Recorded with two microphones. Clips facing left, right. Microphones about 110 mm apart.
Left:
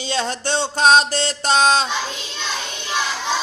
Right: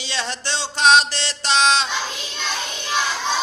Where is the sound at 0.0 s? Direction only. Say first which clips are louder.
Left 5 dB; 45° left (ahead or behind).